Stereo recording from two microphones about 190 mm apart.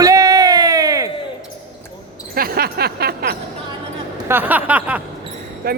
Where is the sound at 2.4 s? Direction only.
50° right (ahead or behind).